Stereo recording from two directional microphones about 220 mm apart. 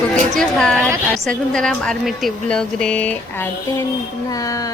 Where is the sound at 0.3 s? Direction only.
5° left (ahead or behind).